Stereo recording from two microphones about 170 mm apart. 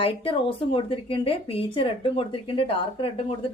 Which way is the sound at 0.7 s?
30° left (ahead or behind).